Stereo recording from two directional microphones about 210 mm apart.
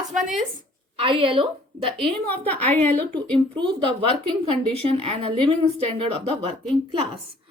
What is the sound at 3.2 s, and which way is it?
A woman's voice, 25° right (ahead or behind).